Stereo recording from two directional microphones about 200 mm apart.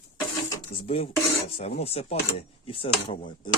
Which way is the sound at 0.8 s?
30° left (ahead or behind).